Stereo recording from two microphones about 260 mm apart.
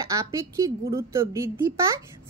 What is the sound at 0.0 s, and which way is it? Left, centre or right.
A woman's voice, centre.